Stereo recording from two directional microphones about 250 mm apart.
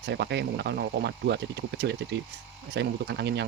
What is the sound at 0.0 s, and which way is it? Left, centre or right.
Speech, right.